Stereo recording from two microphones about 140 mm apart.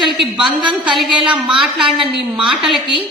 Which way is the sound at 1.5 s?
Centre (ahead or behind).